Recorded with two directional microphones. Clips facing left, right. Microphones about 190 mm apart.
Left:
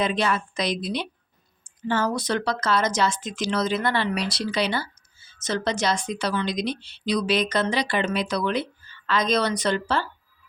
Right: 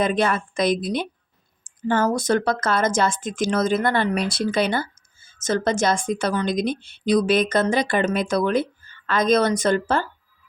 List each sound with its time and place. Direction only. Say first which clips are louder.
0.0 s speech: right 3 dB; 50° right (ahead or behind)